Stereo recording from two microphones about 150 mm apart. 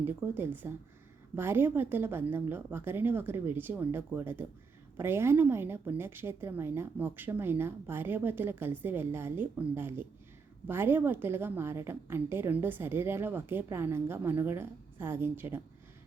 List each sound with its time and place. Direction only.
0.0 s a woman's voice: 15° right (ahead or behind)